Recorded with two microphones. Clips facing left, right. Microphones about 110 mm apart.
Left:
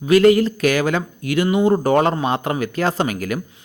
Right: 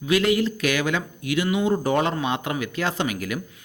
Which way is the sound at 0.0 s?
45° left (ahead or behind).